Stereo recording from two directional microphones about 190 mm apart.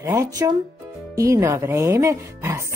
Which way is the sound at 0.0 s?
15° right (ahead or behind).